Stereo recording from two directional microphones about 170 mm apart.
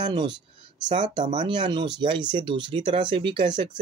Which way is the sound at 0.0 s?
25° right (ahead or behind).